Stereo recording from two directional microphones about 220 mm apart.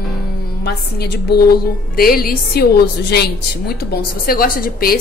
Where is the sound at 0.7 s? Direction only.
45° left (ahead or behind).